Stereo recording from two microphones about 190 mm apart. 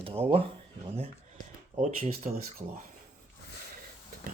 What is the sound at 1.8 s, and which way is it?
Speech, 35° right (ahead or behind).